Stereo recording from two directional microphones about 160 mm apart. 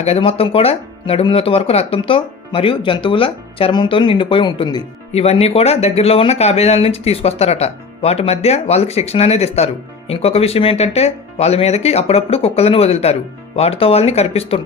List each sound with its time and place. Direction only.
0.0 s speech: 40° left (ahead or behind)